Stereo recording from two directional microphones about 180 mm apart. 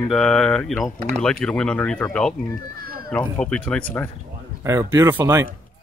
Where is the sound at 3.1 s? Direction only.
5° left (ahead or behind).